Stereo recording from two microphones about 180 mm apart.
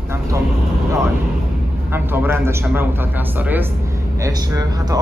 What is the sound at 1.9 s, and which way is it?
Speech, 10° right (ahead or behind).